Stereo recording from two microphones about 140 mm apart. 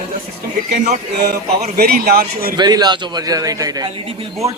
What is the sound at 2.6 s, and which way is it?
Speech, 30° right (ahead or behind).